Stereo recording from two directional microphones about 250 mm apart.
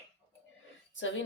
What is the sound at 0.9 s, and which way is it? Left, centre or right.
Speech, left.